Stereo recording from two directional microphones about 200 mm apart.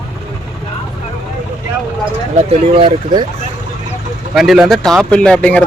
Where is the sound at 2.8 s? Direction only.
25° right (ahead or behind).